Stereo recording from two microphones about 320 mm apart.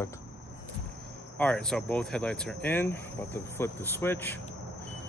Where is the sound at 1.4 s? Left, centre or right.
Centre.